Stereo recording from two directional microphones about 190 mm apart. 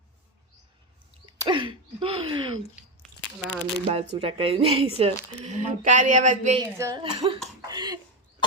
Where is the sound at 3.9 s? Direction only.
30° right (ahead or behind).